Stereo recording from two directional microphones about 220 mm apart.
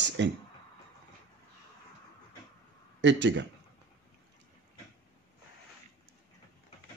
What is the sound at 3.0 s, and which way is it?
Speech, 55° right (ahead or behind).